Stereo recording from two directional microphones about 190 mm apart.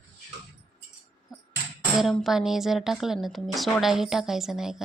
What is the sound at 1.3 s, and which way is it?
Music, 20° left (ahead or behind).